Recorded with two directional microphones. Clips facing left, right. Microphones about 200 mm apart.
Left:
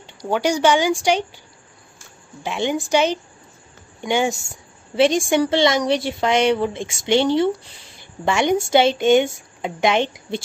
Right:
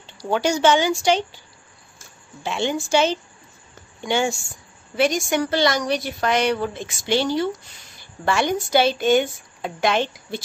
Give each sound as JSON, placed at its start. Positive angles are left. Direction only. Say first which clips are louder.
{"t": 0.0, "sound": "speech", "louder": "left 1 dB", "side_deg": 15}
{"t": 2.4, "sound": "a woman's voice", "louder": "left 1 dB", "side_deg": 15}